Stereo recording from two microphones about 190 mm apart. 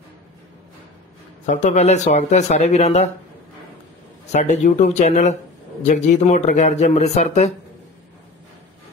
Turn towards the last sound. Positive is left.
turn(degrees=35)  # may be behind; listen again after turning